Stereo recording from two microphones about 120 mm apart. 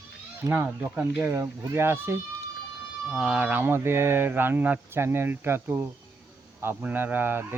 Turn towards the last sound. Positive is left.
turn(degrees=-15)  # may be behind; listen again after turning